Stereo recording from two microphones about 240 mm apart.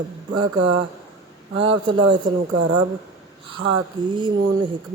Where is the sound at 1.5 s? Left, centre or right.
Right.